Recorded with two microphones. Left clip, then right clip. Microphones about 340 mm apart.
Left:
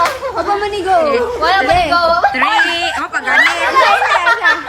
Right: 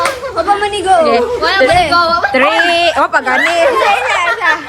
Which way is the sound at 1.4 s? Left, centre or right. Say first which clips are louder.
Right 1 dB; left.